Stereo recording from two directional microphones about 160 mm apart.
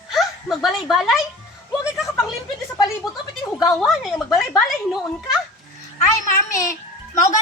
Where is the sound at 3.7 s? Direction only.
Centre (ahead or behind).